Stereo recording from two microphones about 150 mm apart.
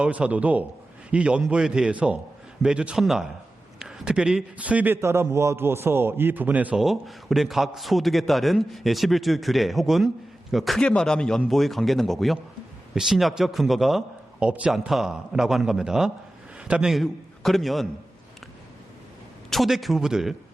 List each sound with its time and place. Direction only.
0.0 s a man's voice: 10° right (ahead or behind)
19.5 s a man's voice: centre (ahead or behind)